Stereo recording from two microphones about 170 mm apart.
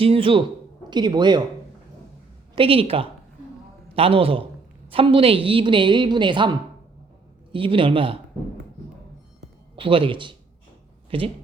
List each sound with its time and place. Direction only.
0.0 s a man's voice: 30° right (ahead or behind)
2.6 s a man's voice: 35° right (ahead or behind)
7.5 s a man's voice: 30° right (ahead or behind)
9.7 s a man's voice: 30° right (ahead or behind)